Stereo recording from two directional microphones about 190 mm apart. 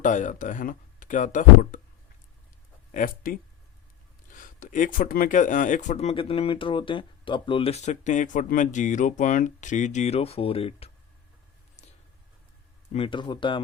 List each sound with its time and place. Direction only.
0.0 s speech: 40° left (ahead or behind)
2.9 s speech: 45° left (ahead or behind)
4.4 s speech: 45° left (ahead or behind)
12.9 s speech: 30° left (ahead or behind)